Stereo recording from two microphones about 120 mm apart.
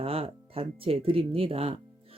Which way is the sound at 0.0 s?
55° right (ahead or behind).